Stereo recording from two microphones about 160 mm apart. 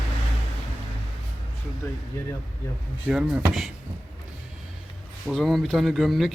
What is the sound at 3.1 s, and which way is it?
Speech, 5° right (ahead or behind).